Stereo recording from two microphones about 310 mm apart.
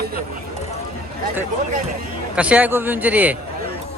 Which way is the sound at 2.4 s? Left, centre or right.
Centre.